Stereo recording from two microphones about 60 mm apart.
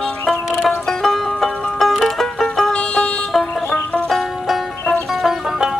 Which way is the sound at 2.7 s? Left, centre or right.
Centre.